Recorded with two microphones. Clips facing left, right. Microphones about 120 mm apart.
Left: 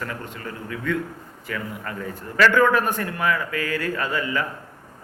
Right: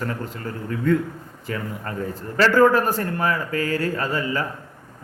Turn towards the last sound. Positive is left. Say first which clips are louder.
# right 1 dB
turn(degrees=-35)  # may be behind; listen again after turning